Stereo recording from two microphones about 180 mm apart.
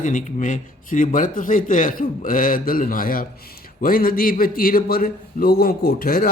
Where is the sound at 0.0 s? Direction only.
45° left (ahead or behind).